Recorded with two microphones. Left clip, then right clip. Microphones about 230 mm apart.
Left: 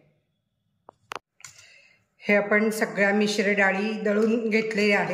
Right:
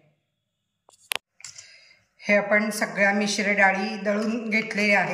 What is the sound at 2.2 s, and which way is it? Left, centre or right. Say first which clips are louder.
Speech: right 1 dB; centre.